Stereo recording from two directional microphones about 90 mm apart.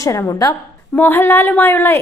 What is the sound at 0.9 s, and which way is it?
Speech, 20° left (ahead or behind).